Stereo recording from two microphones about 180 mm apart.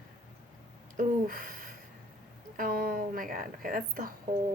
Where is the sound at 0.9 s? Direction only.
50° right (ahead or behind).